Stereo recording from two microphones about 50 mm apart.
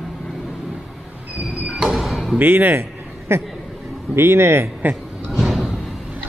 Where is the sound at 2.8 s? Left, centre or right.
Right.